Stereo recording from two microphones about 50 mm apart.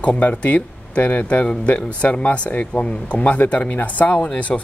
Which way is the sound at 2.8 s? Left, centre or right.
Left.